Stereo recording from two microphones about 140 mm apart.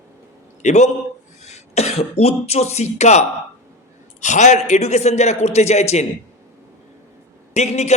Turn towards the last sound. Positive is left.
turn(degrees=55)  # may be behind; listen again after turning